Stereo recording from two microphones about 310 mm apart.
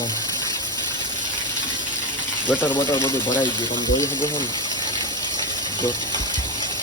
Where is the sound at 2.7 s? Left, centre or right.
Centre.